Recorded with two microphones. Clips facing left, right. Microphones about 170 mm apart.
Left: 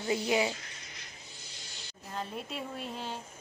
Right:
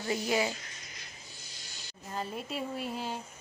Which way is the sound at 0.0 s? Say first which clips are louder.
Left 1 dB; 20° left (ahead or behind).